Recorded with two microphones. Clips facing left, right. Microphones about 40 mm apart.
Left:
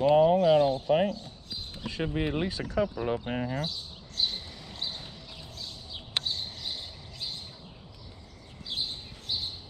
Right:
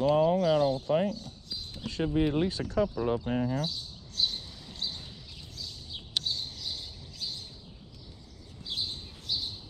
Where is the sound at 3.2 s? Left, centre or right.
Left.